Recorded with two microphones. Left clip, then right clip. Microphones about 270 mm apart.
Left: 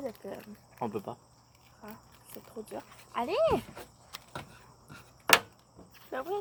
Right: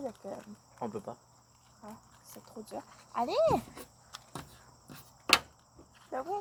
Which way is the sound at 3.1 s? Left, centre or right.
Right.